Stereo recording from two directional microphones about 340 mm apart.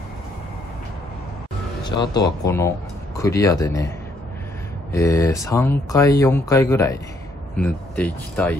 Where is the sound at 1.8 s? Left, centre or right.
Centre.